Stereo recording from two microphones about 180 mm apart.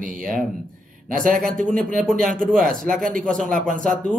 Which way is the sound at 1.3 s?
5° left (ahead or behind).